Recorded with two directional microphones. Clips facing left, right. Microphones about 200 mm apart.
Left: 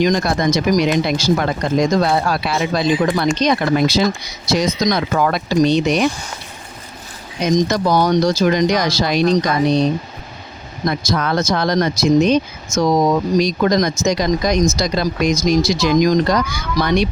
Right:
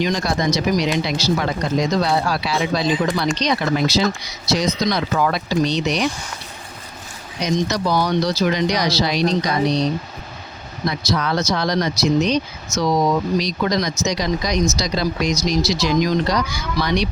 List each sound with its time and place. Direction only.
0.0 s speech: 50° left (ahead or behind)
7.4 s speech: 45° left (ahead or behind)